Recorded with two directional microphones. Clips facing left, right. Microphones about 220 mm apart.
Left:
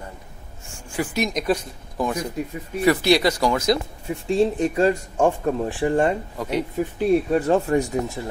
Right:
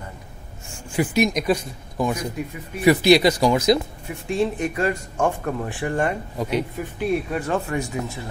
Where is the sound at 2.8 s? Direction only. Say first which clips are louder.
Right 3 dB; 15° right (ahead or behind).